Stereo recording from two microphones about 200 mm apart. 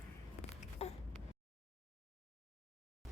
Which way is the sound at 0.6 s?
30° left (ahead or behind).